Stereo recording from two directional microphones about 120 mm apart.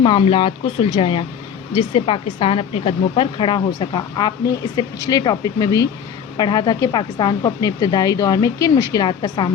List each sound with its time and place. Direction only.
0.0 s speech: 50° left (ahead or behind)